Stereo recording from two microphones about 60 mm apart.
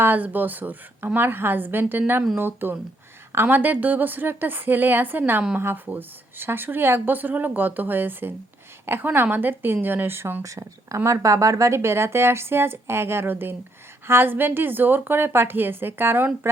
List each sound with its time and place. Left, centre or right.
0.0 s a woman's voice: right
10.4 s a woman's voice: right